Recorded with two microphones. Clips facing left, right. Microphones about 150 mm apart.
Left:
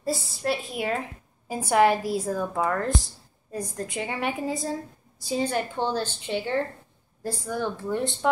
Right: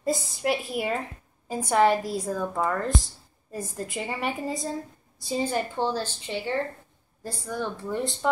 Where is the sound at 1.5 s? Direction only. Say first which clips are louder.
Left 1 dB; 5° left (ahead or behind).